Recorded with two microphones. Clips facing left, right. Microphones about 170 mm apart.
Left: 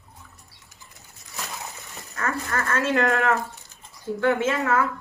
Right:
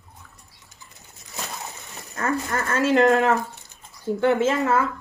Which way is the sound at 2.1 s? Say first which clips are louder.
Right 3 dB; 30° right (ahead or behind).